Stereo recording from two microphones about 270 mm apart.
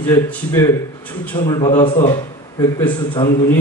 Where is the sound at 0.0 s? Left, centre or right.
Centre.